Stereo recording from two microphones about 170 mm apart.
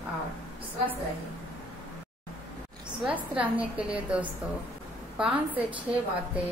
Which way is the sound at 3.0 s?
5° right (ahead or behind).